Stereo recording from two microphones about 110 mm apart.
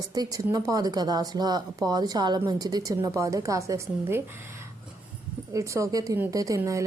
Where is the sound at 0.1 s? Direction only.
35° right (ahead or behind).